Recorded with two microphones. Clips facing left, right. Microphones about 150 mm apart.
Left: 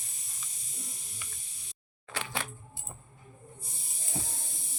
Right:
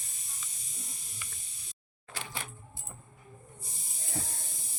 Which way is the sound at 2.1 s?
75° left (ahead or behind).